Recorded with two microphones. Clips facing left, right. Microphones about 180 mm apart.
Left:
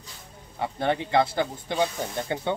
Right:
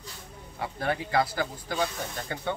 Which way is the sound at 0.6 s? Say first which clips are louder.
Left 4 dB; 25° left (ahead or behind).